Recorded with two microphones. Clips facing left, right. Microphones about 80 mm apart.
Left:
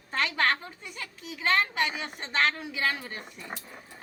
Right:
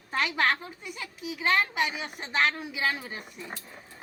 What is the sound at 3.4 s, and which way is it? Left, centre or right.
Speech, centre.